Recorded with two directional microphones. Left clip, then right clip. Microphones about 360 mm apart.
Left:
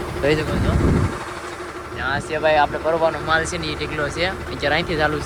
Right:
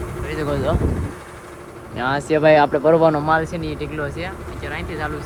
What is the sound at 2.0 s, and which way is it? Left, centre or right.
Speech, centre.